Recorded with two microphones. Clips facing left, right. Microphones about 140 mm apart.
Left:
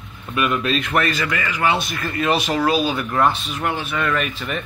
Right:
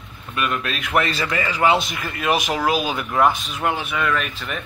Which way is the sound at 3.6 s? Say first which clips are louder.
Right 1 dB; 15° right (ahead or behind).